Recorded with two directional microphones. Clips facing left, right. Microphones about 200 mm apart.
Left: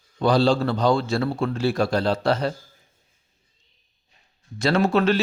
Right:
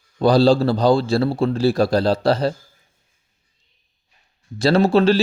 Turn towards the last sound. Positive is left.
turn(degrees=-30)  # may be behind; listen again after turning